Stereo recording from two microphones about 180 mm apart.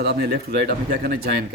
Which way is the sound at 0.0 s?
65° right (ahead or behind).